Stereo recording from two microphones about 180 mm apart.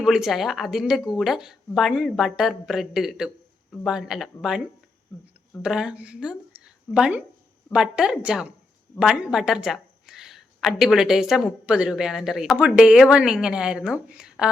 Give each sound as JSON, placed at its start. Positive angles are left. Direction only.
{"t": 0.0, "sound": "a woman's voice", "side_deg": -5}
{"t": 5.6, "sound": "a woman's voice", "side_deg": -5}
{"t": 6.5, "sound": "a sound", "side_deg": -5}
{"t": 7.7, "sound": "a woman's voice", "side_deg": -5}